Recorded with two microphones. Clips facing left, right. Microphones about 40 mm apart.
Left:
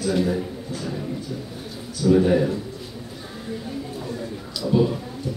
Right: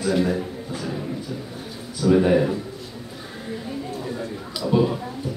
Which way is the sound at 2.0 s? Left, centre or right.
Centre.